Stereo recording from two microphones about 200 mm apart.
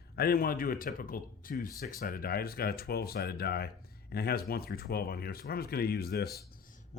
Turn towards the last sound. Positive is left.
turn(degrees=50)  # may be behind; listen again after turning